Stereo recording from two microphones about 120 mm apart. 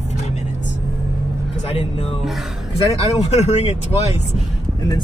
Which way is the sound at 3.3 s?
65° left (ahead or behind).